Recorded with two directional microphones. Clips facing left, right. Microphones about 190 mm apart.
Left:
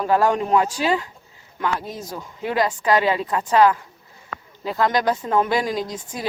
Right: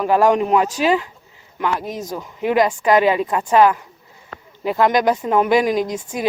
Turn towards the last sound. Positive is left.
turn(degrees=-15)  # may be behind; listen again after turning